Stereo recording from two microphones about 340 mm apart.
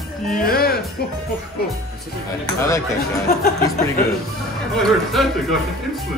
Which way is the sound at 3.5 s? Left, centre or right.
Left.